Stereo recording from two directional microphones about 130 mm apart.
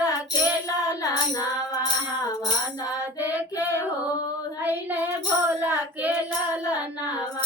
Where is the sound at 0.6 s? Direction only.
30° left (ahead or behind).